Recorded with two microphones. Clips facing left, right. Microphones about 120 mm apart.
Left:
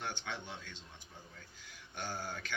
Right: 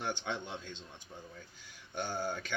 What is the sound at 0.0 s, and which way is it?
Speech, 20° right (ahead or behind).